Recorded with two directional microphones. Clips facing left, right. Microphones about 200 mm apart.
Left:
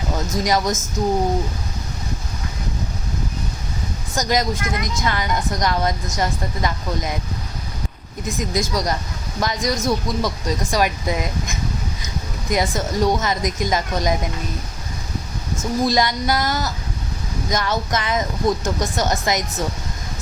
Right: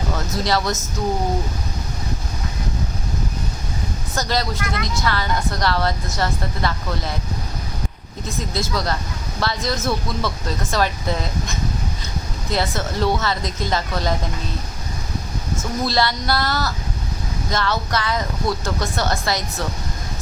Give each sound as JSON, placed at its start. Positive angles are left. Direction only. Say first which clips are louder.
{"t": 0.4, "sound": "a woman's voice", "louder": "left 1 dB", "side_deg": 15}
{"t": 4.1, "sound": "a woman's voice", "louder": "left 3 dB", "side_deg": 15}
{"t": 8.4, "sound": "a woman's voice", "louder": "left 2 dB", "side_deg": 15}
{"t": 15.8, "sound": "a woman's voice", "louder": "left 2 dB", "side_deg": 15}